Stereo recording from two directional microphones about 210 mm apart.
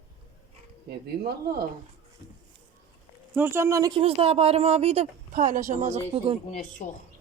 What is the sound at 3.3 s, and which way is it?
Speech, 10° right (ahead or behind).